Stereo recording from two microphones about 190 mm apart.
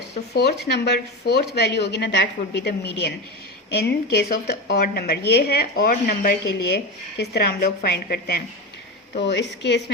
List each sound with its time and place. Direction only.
0.3 s a woman's voice: 60° left (ahead or behind)